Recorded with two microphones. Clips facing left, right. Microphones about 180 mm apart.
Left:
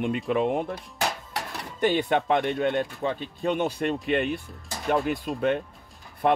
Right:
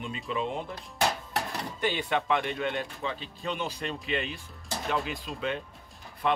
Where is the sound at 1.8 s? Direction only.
50° left (ahead or behind).